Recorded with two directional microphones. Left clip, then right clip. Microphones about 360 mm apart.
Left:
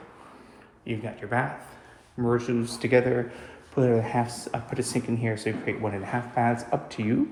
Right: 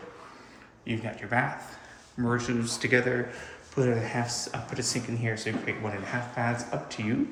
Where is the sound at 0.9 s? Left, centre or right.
Centre.